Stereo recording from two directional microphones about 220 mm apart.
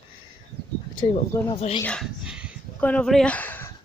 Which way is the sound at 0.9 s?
25° left (ahead or behind).